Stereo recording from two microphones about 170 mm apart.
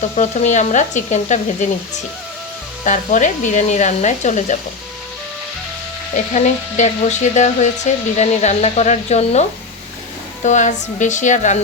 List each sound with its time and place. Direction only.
0.2 s speech: 45° left (ahead or behind)
2.8 s speech: 45° left (ahead or behind)
6.3 s speech: 45° left (ahead or behind)